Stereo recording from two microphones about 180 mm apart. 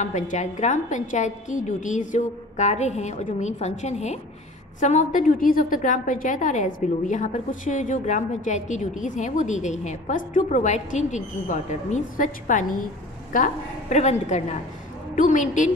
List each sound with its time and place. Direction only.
0.0 s a woman's voice: 40° left (ahead or behind)